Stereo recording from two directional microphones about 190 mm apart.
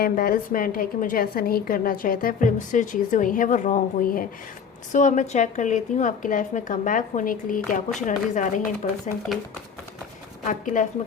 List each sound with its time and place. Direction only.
0.0 s a woman's voice: 50° left (ahead or behind)
9.3 s speech: centre (ahead or behind)
10.4 s a woman's voice: 40° left (ahead or behind)